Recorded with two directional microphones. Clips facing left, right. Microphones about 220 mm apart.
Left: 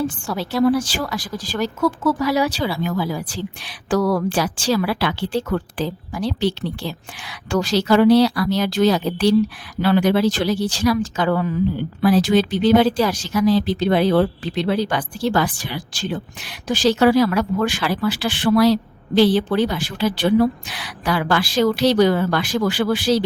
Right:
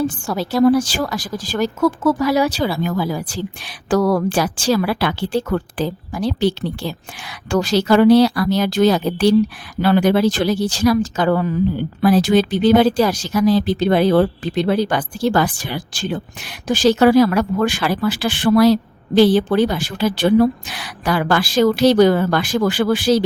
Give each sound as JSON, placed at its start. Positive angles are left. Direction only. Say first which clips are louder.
{"t": 0.3, "sound": "speech", "louder": "right 4 dB", "side_deg": -45}